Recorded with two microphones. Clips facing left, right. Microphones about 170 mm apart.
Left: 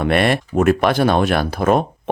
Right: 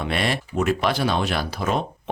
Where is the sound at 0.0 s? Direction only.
55° left (ahead or behind).